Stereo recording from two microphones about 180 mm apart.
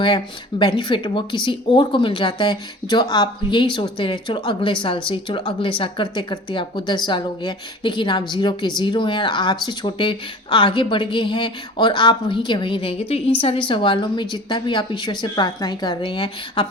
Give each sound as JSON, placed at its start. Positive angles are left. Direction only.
{"t": 0.6, "sound": "speech", "side_deg": 25}